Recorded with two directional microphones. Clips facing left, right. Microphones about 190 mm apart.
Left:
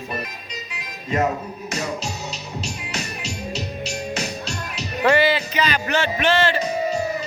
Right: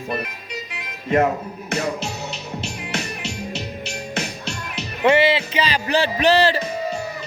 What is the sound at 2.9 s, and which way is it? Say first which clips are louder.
Music: right 2 dB; 55° right (ahead or behind).